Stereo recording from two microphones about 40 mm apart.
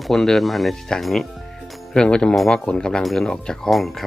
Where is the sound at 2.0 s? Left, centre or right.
Centre.